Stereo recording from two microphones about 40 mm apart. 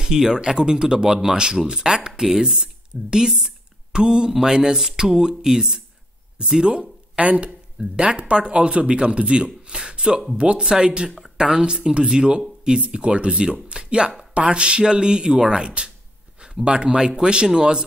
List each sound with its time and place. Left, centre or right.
0.0 s speech: centre
2.5 s speech: right
3.4 s a sound: right
4.3 s speech: centre
7.2 s speech: right